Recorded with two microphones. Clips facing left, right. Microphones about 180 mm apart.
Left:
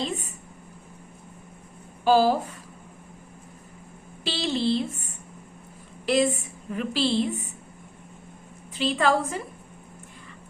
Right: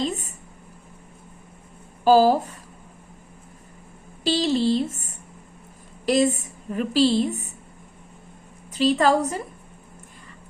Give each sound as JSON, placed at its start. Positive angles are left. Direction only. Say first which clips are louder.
{"t": 0.0, "sound": "speech", "louder": "right 4 dB", "side_deg": -40}
{"t": 2.0, "sound": "a woman's voice", "louder": "right 4 dB", "side_deg": -40}
{"t": 4.2, "sound": "a woman's voice", "louder": "right 5 dB", "side_deg": -40}
{"t": 8.7, "sound": "a woman's voice", "louder": "right 4 dB", "side_deg": -40}